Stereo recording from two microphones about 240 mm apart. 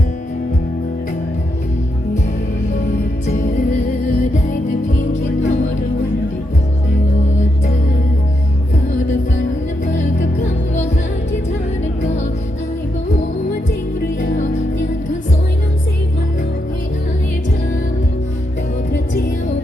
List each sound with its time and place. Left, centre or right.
3.2 s music: left
4.9 s music: left
9.8 s music: left
14.2 s music: left